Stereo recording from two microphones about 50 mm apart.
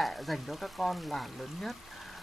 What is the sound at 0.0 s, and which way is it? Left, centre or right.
Speech, centre.